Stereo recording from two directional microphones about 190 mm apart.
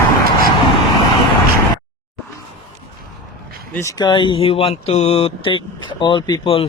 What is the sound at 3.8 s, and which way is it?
Speech, 20° left (ahead or behind).